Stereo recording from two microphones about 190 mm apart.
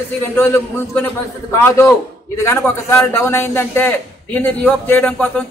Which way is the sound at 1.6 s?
15° left (ahead or behind).